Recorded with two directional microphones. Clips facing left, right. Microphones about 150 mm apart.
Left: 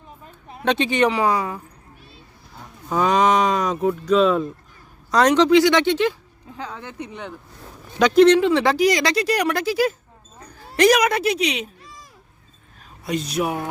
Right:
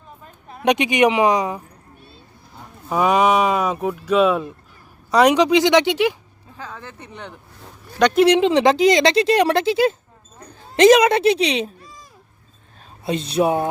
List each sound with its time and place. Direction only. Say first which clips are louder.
0.6 s speech: right 3 dB; 15° right (ahead or behind)
2.9 s speech: right 1 dB; 10° right (ahead or behind)
6.6 s speech: left 3 dB; 15° left (ahead or behind)
7.9 s speech: left 1 dB; centre (ahead or behind)
8.3 s speech: right 1 dB; 20° right (ahead or behind)
12.8 s speech: right 2 dB; 30° right (ahead or behind)